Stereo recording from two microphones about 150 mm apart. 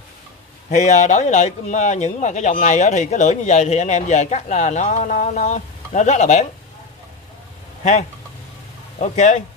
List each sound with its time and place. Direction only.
0.7 s speech: 50° left (ahead or behind)
9.0 s speech: 55° left (ahead or behind)